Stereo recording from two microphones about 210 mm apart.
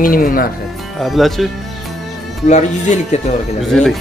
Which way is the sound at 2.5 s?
35° left (ahead or behind).